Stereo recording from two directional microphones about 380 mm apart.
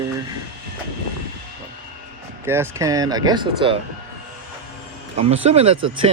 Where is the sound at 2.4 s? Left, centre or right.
Centre.